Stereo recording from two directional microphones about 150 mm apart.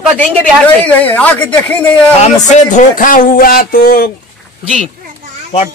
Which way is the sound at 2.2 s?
50° left (ahead or behind).